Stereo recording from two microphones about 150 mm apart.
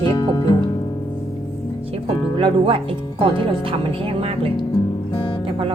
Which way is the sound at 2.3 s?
35° right (ahead or behind).